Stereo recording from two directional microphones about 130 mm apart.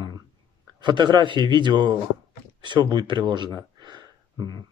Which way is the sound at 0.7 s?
35° right (ahead or behind).